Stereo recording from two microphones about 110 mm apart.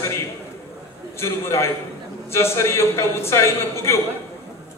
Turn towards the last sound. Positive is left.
turn(degrees=25)  # may be behind; listen again after turning